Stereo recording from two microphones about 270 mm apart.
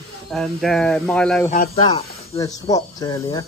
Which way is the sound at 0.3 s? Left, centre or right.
Centre.